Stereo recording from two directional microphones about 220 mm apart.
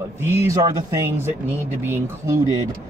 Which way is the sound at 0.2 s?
10° right (ahead or behind).